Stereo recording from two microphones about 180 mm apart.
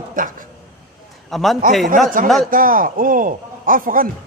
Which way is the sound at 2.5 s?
50° right (ahead or behind).